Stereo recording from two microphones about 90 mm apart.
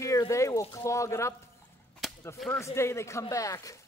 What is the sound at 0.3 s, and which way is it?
Speech, 35° left (ahead or behind).